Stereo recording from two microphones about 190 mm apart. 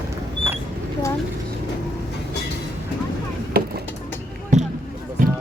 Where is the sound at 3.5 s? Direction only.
55° right (ahead or behind).